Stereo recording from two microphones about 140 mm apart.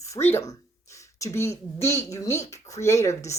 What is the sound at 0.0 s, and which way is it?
Speech, 20° left (ahead or behind).